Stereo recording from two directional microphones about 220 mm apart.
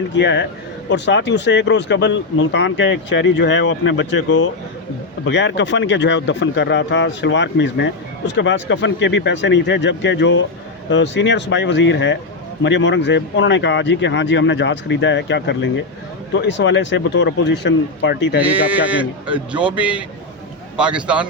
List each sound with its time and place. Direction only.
0.2 s speech: 55° left (ahead or behind)
18.4 s a man's voice: 5° right (ahead or behind)